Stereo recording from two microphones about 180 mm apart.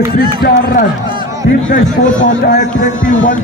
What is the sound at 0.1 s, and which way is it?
Speech, 60° left (ahead or behind).